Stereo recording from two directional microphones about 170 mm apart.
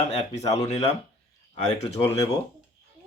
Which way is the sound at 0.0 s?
40° left (ahead or behind).